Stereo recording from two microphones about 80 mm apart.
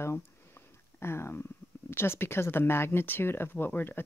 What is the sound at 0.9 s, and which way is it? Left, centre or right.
Speech, left.